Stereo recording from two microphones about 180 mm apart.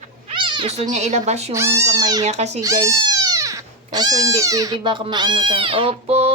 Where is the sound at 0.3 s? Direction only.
25° right (ahead or behind).